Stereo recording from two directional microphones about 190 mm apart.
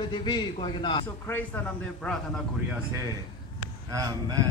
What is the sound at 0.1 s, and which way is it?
Speech, 25° left (ahead or behind).